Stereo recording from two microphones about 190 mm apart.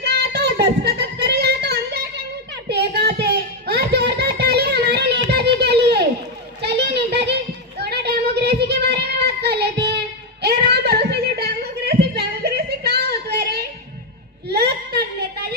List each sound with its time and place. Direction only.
0.0 s child singing: 60° right (ahead or behind)
2.6 s a sound: 60° right (ahead or behind)
14.4 s whimper: 60° right (ahead or behind)